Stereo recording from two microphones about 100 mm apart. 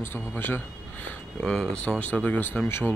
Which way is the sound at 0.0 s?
20° left (ahead or behind).